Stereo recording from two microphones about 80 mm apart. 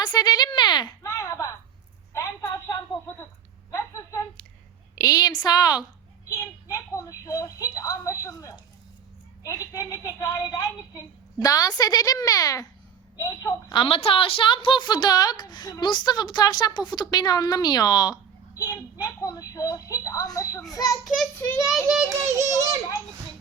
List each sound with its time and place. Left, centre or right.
0.0 s a woman's voice: left
1.0 s a sound: left
2.4 s a sound: left
3.7 s a sound: left
4.9 s a woman's voice: left
6.2 s a woman's voice: left
13.7 s a woman's voice: left
21.3 s a child's voice: left
22.1 s a child's voice: right